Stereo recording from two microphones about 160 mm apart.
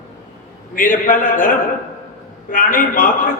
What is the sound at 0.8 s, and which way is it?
Speech, 60° left (ahead or behind).